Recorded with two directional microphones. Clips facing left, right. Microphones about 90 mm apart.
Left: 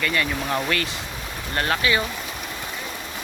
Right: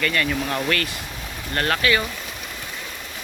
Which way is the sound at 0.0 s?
15° left (ahead or behind).